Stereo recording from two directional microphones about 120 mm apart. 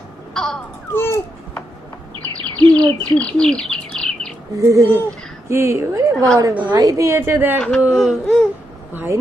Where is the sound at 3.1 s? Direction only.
10° left (ahead or behind).